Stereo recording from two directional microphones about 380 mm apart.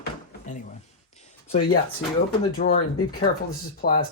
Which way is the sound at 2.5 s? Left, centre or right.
Left.